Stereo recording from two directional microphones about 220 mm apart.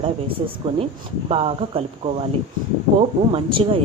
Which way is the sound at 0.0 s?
25° right (ahead or behind).